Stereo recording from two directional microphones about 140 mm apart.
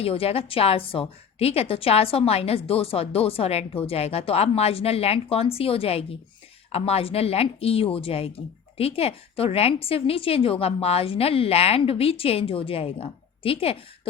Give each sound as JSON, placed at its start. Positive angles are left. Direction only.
{"t": 0.0, "sound": "a woman's voice", "side_deg": 45}